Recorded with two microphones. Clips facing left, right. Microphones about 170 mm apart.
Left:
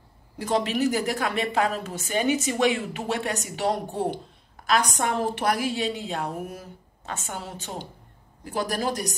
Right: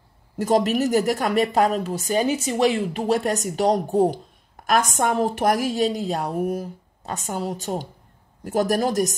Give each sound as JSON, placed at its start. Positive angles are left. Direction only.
{"t": 0.4, "sound": "a woman's voice", "side_deg": -45}